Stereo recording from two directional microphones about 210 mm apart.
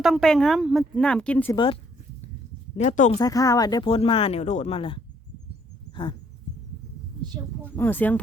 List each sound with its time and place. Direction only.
0.0 s a woman's voice: centre (ahead or behind)
1.5 s speech: 25° left (ahead or behind)
2.7 s speech: 35° left (ahead or behind)
3.2 s speech: 15° left (ahead or behind)
5.9 s a sound: 25° left (ahead or behind)
7.3 s speech: 20° right (ahead or behind)
7.8 s speech: 10° left (ahead or behind)